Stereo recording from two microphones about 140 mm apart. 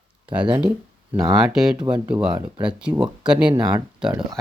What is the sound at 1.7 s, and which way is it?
Speech, 35° right (ahead or behind).